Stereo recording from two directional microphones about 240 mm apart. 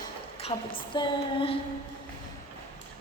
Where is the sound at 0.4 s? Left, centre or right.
Left.